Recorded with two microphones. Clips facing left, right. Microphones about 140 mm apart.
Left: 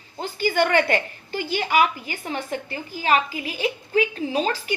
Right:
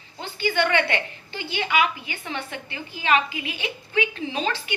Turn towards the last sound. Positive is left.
turn(degrees=40)  # may be behind; listen again after turning